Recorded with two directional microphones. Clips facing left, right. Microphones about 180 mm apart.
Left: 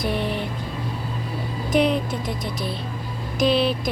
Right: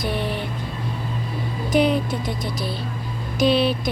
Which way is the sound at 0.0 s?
Centre (ahead or behind).